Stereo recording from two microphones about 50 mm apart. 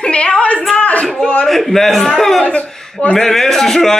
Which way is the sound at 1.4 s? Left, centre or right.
Centre.